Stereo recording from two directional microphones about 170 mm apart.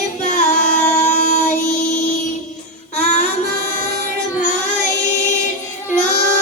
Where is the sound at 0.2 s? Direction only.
45° left (ahead or behind).